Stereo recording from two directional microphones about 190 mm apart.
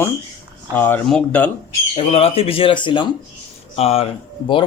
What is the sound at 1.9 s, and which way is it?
Speech, 30° left (ahead or behind).